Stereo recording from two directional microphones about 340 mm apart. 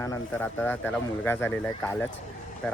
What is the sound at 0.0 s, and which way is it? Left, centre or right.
Speech, centre.